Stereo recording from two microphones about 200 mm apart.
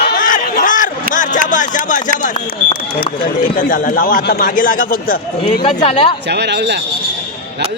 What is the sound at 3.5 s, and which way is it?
Speech, 45° left (ahead or behind).